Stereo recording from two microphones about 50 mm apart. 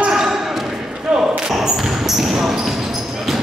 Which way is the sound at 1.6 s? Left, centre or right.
Centre.